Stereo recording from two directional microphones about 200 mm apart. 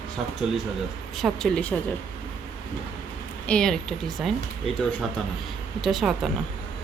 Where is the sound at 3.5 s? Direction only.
5° left (ahead or behind).